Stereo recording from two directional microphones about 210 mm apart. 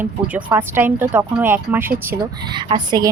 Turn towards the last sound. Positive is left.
turn(degrees=-20)  # may be behind; listen again after turning